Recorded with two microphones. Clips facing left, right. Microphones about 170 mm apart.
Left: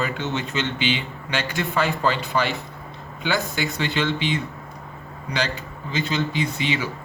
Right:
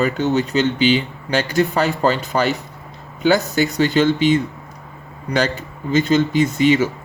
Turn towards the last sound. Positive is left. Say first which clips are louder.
# right 10 dB
turn(degrees=-45)  # may be behind; listen again after turning